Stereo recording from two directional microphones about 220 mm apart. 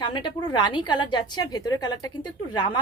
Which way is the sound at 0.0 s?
20° left (ahead or behind).